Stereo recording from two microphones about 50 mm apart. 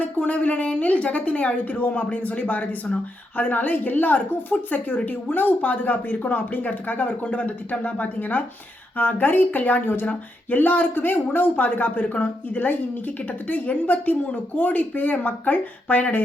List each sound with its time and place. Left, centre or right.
0.0 s a woman's voice: left